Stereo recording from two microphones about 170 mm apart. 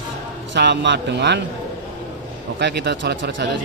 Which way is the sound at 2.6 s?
80° right.